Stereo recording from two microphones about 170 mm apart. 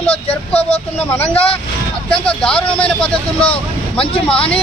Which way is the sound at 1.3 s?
35° left (ahead or behind).